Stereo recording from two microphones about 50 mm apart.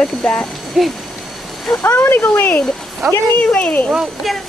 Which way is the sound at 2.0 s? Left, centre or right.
Left.